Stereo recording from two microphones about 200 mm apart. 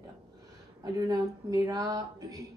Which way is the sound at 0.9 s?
20° right (ahead or behind).